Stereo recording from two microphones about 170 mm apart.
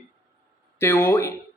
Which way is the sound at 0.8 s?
15° left (ahead or behind).